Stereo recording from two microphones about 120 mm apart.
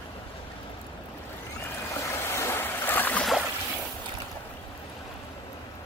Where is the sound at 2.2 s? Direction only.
25° left (ahead or behind).